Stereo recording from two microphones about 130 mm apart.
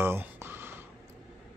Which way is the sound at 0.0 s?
15° right (ahead or behind).